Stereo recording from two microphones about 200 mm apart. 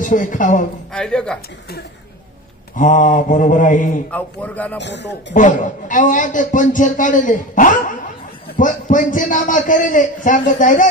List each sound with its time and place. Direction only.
0.0 s a man's voice: 40° left (ahead or behind)
0.9 s speech: 5° left (ahead or behind)
2.7 s a man's voice: 40° left (ahead or behind)
4.1 s a man's voice: 10° left (ahead or behind)
4.7 s a man's voice: 60° left (ahead or behind)
5.3 s a man's voice: 40° left (ahead or behind)